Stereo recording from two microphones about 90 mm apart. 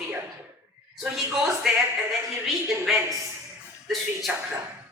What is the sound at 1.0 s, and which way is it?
A man's voice, 5° right (ahead or behind).